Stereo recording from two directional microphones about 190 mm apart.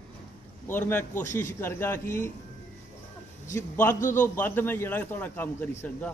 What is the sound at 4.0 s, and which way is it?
Speech, 45° left (ahead or behind).